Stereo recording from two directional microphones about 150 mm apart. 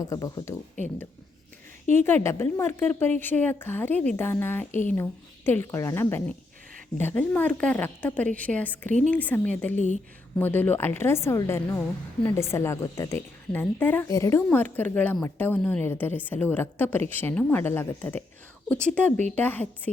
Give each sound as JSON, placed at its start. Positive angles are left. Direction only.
{"t": 0.0, "sound": "speech", "side_deg": 25}
{"t": 2.0, "sound": "a woman's voice", "side_deg": 15}
{"t": 9.7, "sound": "speech", "side_deg": 55}
{"t": 10.3, "sound": "a woman's voice", "side_deg": 10}